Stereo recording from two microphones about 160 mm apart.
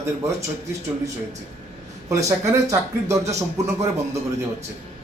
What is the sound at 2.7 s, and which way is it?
Speech, 20° right (ahead or behind).